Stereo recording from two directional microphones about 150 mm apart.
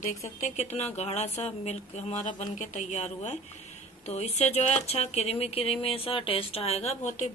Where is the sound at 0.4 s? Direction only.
45° left (ahead or behind).